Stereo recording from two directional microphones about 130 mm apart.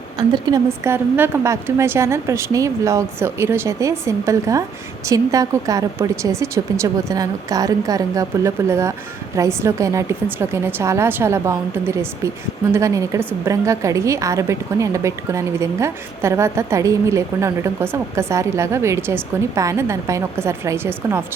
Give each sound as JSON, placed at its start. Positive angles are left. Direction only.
{"t": 0.2, "sound": "a woman's voice", "side_deg": -30}
{"t": 0.9, "sound": "a woman's voice", "side_deg": -15}